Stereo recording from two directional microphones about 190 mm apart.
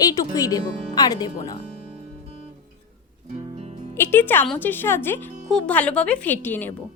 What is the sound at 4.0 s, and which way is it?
Speech, 10° left (ahead or behind).